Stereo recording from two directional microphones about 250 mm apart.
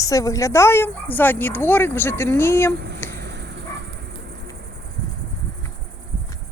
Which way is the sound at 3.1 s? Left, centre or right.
Right.